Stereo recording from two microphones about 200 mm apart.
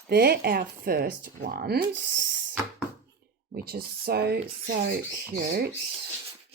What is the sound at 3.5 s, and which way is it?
Speech, 50° right (ahead or behind).